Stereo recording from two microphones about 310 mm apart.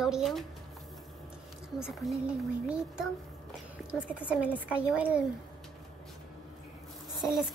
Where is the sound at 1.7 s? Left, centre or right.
Centre.